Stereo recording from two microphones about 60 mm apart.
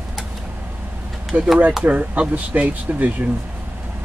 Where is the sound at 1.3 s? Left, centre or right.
Right.